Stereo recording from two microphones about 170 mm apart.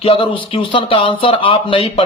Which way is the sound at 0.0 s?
30° left (ahead or behind).